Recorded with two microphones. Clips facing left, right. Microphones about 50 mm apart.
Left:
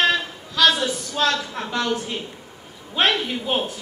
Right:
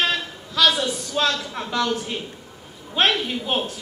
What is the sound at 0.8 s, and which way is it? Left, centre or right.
A woman's voice, left.